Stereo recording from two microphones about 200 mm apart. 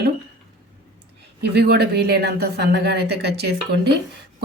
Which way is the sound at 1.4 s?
55° right (ahead or behind).